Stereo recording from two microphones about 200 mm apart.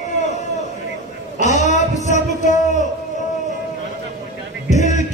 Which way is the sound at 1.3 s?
35° left (ahead or behind).